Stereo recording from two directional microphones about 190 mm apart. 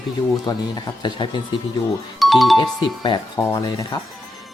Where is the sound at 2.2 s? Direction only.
Centre (ahead or behind).